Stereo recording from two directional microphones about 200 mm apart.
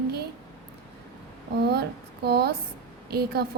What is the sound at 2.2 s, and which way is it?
Speech, 55° right (ahead or behind).